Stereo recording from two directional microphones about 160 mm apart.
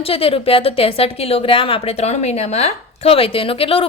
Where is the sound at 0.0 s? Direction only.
35° left (ahead or behind).